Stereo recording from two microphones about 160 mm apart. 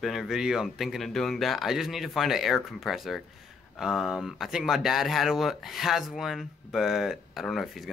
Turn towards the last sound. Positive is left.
turn(degrees=0)  # may be behind; listen again after turning